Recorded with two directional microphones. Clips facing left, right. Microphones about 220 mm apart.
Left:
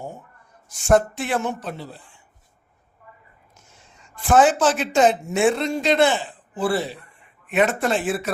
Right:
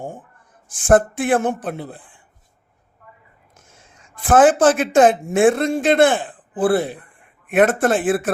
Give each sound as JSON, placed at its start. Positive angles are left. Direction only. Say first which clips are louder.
{"t": 0.0, "sound": "a sound", "louder": "right 3 dB", "side_deg": -50}
{"t": 0.7, "sound": "speech", "louder": "right 3 dB", "side_deg": -50}
{"t": 3.5, "sound": "whispering", "louder": "right 4 dB", "side_deg": -90}
{"t": 4.2, "sound": "speech", "louder": "right 4 dB", "side_deg": -50}